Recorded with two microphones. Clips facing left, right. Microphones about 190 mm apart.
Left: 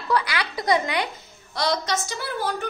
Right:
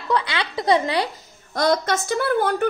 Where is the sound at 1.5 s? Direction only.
50° right (ahead or behind).